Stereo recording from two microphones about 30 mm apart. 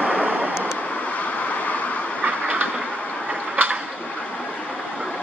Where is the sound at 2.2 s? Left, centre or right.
Right.